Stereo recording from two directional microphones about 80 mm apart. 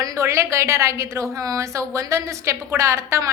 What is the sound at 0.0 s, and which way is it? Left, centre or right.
A woman's voice, right.